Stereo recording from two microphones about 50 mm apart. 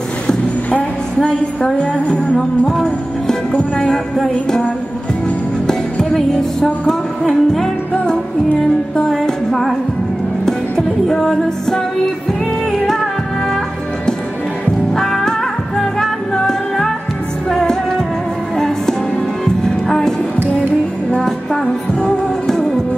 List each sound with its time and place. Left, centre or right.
0.3 s music: centre
5.7 s music: centre
8.9 s music: centre
15.0 s music: centre
19.4 s music: centre
22.0 s music: centre